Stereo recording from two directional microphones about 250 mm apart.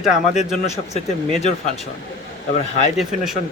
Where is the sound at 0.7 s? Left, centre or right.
Left.